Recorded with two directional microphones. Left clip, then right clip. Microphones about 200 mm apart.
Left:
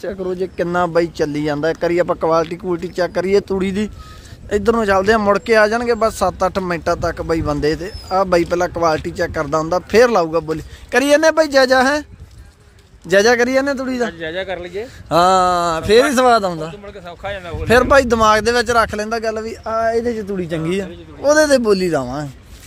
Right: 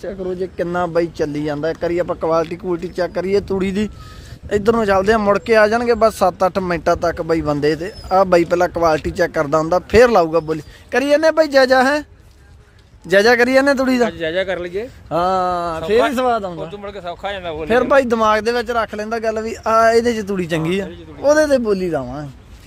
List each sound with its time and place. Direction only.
0.0 s speech: 15° left (ahead or behind)
3.6 s speech: 5° right (ahead or behind)
13.1 s speech: 5° left (ahead or behind); by 14.1 s 15° right (ahead or behind)
14.1 s speech: 55° right (ahead or behind)
15.1 s speech: 10° left (ahead or behind)
16.8 s a man's voice: 25° right (ahead or behind)
17.7 s speech: 10° left (ahead or behind)
19.6 s speech: 20° right (ahead or behind)
20.7 s speech: centre (ahead or behind)